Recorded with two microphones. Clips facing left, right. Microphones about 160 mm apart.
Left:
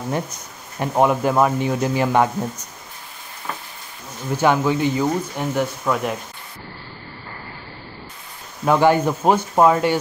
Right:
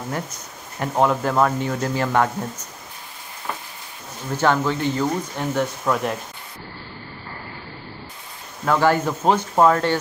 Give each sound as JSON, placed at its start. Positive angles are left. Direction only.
{"t": 0.7, "sound": "speech", "side_deg": 15}
{"t": 4.4, "sound": "speech", "side_deg": 15}
{"t": 8.6, "sound": "speech", "side_deg": 15}